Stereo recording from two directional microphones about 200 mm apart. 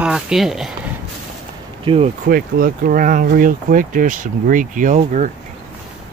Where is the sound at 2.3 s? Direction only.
45° right (ahead or behind).